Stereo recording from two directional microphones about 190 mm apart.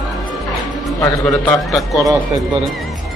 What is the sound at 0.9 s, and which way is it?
Speech, 5° left (ahead or behind).